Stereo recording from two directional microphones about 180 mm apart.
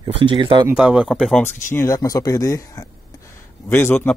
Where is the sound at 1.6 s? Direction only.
15° left (ahead or behind).